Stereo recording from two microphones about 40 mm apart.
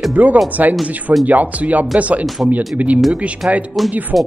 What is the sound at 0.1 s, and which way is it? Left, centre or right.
Speech, right.